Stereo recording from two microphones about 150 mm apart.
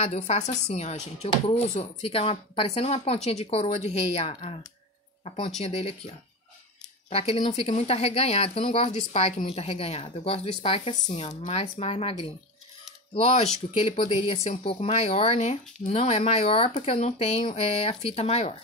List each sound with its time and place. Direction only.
0.0 s speech: 45° left (ahead or behind)